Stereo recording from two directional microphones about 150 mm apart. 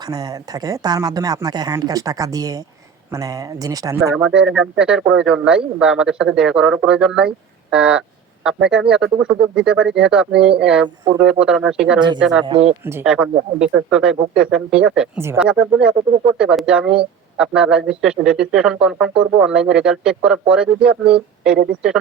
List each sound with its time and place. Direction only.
0.0 s speech: 25° right (ahead or behind)
4.1 s speech: 5° right (ahead or behind)
12.5 s speech: 40° right (ahead or behind)
12.8 s speech: 15° right (ahead or behind)